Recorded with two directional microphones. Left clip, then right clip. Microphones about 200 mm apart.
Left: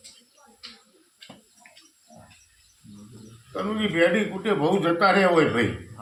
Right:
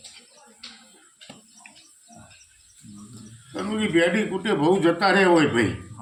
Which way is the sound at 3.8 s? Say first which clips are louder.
Even; 20° left (ahead or behind).